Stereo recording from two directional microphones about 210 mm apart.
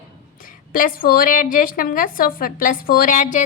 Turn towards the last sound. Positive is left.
turn(degrees=40)  # may be behind; listen again after turning